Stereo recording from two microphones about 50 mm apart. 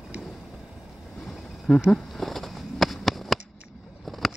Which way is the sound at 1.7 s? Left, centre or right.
Centre.